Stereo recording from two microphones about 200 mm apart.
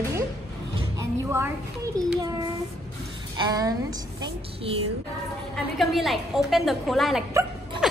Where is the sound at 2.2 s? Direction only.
20° right (ahead or behind).